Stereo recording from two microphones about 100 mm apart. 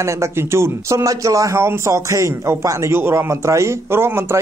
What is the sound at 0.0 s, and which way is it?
Speech, 30° right (ahead or behind).